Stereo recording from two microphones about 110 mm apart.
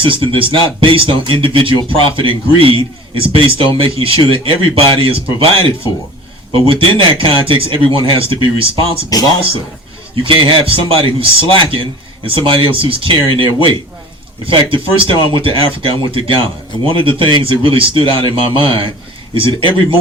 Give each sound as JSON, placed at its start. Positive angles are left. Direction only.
{"t": 0.0, "sound": "a man's voice", "side_deg": -50}
{"t": 9.1, "sound": "speech", "side_deg": 35}
{"t": 10.2, "sound": "a man's voice", "side_deg": -50}